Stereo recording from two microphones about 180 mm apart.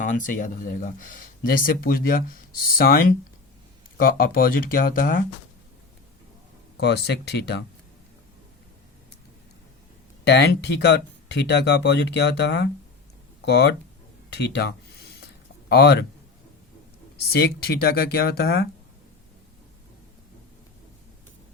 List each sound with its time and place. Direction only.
0.0 s speech: 45° left (ahead or behind)
6.7 s speech: 65° left (ahead or behind)
10.2 s speech: 70° left (ahead or behind)
14.3 s a sound: 70° left (ahead or behind)
15.7 s speech: 65° left (ahead or behind)
17.3 s speech: 60° left (ahead or behind)